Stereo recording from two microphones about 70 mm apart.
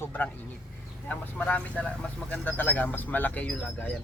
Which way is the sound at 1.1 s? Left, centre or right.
Left.